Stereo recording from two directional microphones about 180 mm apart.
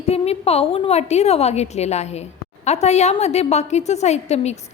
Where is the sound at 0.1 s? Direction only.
35° left (ahead or behind).